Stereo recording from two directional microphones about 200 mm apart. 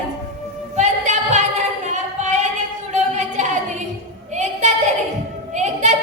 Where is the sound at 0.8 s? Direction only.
35° right (ahead or behind).